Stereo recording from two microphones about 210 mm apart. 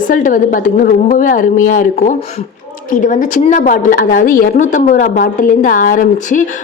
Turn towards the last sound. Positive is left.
turn(degrees=40)  # may be behind; listen again after turning